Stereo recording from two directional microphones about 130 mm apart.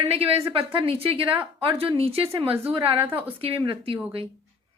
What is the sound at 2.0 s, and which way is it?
Speech, 50° right (ahead or behind).